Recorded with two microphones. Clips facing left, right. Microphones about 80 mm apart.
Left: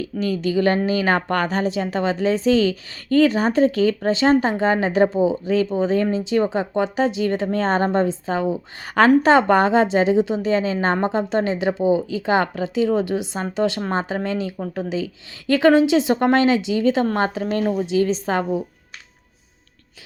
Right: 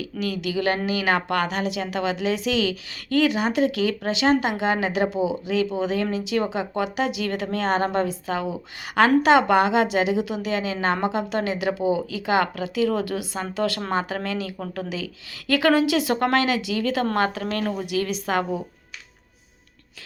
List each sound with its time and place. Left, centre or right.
0.0 s a woman's voice: left